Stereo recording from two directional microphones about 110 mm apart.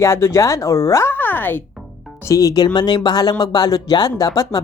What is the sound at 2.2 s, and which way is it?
Speech, 35° left (ahead or behind).